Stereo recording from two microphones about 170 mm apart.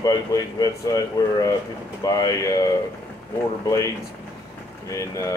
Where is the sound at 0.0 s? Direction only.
20° left (ahead or behind).